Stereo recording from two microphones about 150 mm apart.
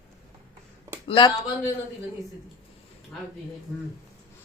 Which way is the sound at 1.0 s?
35° left (ahead or behind).